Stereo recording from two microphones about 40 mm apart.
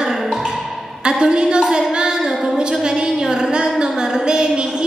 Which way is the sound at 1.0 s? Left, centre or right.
Right.